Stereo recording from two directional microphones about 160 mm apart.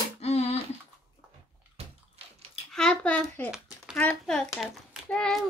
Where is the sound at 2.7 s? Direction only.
5° left (ahead or behind).